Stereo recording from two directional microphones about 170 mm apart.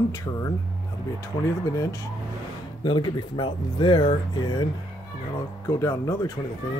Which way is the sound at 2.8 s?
25° left (ahead or behind).